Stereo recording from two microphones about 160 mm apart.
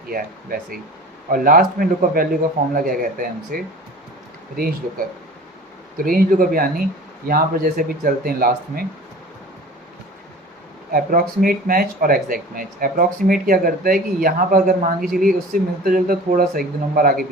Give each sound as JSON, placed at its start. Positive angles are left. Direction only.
{"t": 0.1, "sound": "speech", "side_deg": -65}
{"t": 10.9, "sound": "speech", "side_deg": -65}